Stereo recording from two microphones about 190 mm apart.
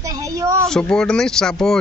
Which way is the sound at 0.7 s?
5° left (ahead or behind).